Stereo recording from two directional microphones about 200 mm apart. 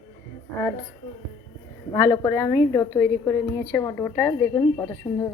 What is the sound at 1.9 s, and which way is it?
A woman's voice, 20° left (ahead or behind).